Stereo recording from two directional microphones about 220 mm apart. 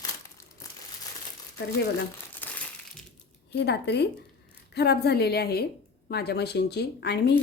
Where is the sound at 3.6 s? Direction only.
50° left (ahead or behind).